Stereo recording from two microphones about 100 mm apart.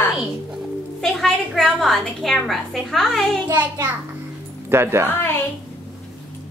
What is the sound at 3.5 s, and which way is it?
Speech, 20° right (ahead or behind).